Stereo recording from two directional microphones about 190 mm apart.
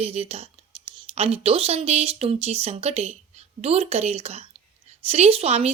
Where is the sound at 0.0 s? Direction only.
30° right (ahead or behind).